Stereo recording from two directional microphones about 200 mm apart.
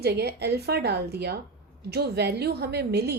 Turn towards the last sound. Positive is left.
turn(degrees=-55)  # may be behind; listen again after turning